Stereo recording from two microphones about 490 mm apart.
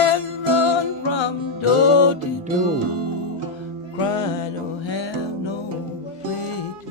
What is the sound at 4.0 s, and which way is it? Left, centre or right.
Music, left.